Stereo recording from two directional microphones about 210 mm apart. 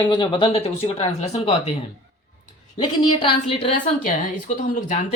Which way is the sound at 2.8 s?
20° left (ahead or behind).